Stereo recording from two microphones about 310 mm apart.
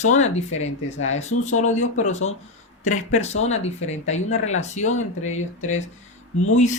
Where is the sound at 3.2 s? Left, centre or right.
Left.